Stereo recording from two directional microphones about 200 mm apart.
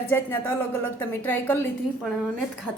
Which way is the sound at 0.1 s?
10° left (ahead or behind).